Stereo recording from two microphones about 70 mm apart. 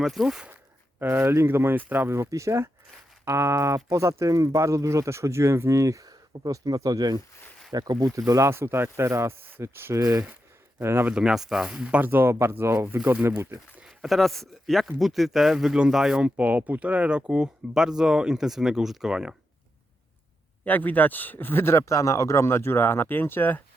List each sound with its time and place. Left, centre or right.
0.0 s speech: centre
0.5 s speech: right
2.3 s speech: right
7.7 s speech: right
8.3 s speech: right
10.0 s speech: right
10.8 s speech: right
11.1 s speech: centre
11.9 s speech: right
13.8 s speech: centre
20.7 s speech: left